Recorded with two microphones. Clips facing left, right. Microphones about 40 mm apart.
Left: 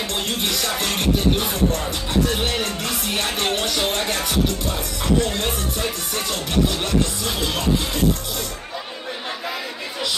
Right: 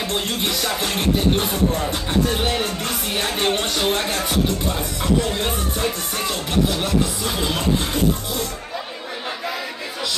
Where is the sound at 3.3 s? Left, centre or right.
Centre.